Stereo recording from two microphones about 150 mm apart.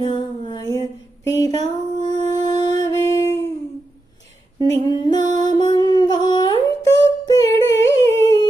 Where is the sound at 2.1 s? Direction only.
25° left (ahead or behind).